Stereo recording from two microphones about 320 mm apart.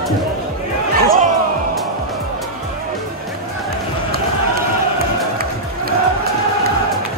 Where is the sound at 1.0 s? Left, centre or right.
Right.